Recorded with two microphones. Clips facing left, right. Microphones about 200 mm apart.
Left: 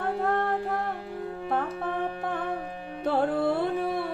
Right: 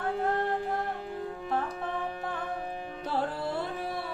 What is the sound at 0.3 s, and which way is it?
Music, 55° left (ahead or behind).